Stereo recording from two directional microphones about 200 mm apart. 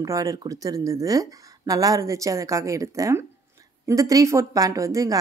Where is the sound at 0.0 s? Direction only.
15° right (ahead or behind).